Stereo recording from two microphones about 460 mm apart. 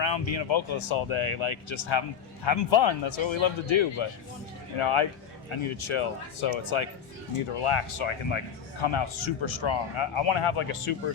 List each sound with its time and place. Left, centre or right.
0.0 s speech: left
4.8 s speech: left